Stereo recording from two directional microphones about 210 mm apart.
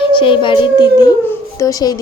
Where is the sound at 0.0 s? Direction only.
25° left (ahead or behind).